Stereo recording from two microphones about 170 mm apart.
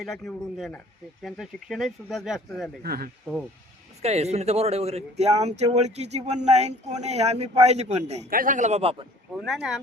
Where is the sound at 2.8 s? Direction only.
65° right (ahead or behind).